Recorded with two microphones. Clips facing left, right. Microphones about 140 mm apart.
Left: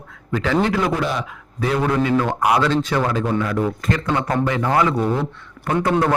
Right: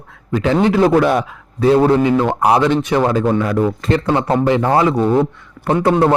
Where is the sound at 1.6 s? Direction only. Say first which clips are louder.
Right 8 dB; 30° right (ahead or behind).